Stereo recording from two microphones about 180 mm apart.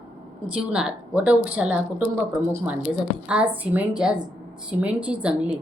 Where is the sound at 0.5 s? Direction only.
5° right (ahead or behind).